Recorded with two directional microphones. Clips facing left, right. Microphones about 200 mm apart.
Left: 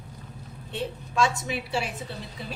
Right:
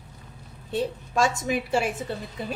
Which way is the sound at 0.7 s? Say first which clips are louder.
Right 5 dB; 40° right (ahead or behind).